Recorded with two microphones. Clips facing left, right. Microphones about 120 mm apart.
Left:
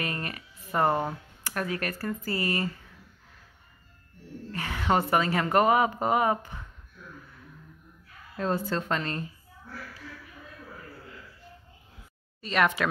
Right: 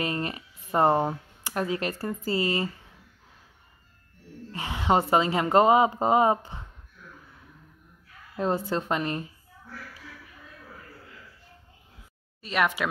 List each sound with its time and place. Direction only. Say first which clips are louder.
0.0 s speech: right 4 dB; 25° right (ahead or behind)
4.5 s speech: right 2 dB; 20° right (ahead or behind)
8.4 s speech: right 2 dB; 20° right (ahead or behind)
12.4 s speech: left 1 dB; 5° right (ahead or behind)